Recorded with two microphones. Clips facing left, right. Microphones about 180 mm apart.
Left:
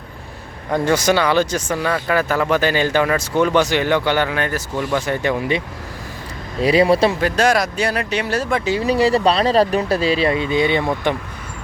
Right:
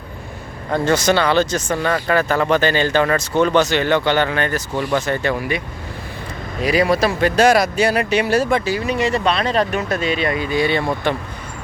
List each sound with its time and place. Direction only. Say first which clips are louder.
0.7 s speech: even; 10° left (ahead or behind)
5.4 s speech: left 2 dB; 25° left (ahead or behind)
7.2 s speech: right 3 dB; centre (ahead or behind)
8.6 s speech: left 3 dB; 30° left (ahead or behind)